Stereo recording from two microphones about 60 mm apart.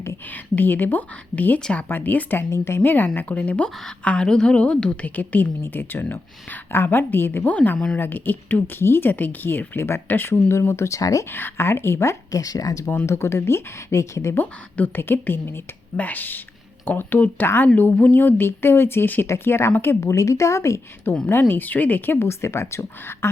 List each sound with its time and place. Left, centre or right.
0.3 s speech: left
2.5 s speech: left
2.8 s a woman's voice: left
8.8 s speech: left
10.5 s speech: left
11.3 s speech: left
12.3 s speech: left
13.1 s speech: left
14.9 s speech: left
19.3 s speech: left
20.0 s speech: left
21.2 s speech: left